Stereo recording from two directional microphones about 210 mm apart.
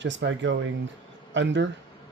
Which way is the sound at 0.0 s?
60° right (ahead or behind).